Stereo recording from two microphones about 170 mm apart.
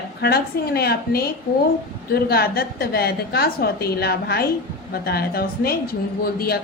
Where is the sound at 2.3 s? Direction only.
65° left (ahead or behind).